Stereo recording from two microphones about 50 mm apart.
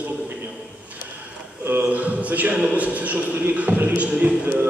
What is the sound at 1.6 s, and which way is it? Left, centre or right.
A man's voice, right.